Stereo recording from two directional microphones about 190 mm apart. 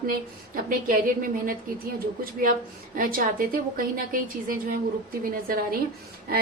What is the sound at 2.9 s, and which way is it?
A woman's voice, 45° right (ahead or behind).